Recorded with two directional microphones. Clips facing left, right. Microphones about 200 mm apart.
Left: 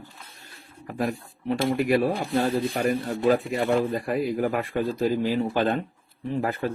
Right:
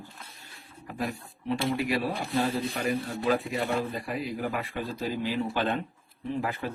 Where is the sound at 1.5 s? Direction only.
50° left (ahead or behind).